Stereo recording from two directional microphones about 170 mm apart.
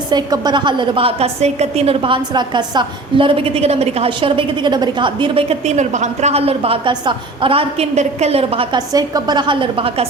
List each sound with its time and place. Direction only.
0.1 s a woman's voice: 25° right (ahead or behind)
8.9 s a woman's voice: 20° right (ahead or behind)